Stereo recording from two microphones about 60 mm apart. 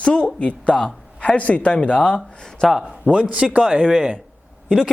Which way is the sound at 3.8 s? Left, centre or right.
Centre.